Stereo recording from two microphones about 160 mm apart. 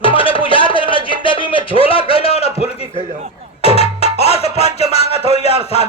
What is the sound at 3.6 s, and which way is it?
Music, 40° left (ahead or behind).